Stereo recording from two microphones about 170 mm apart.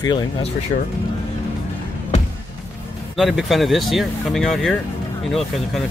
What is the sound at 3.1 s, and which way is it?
Speech, centre (ahead or behind).